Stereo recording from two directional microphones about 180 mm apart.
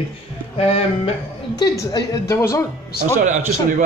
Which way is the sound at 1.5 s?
20° left (ahead or behind).